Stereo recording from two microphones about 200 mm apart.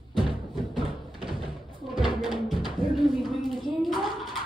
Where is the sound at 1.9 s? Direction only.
25° right (ahead or behind).